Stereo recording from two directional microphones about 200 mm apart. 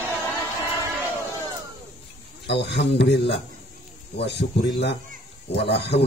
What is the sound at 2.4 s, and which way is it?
A man's voice, 60° left (ahead or behind).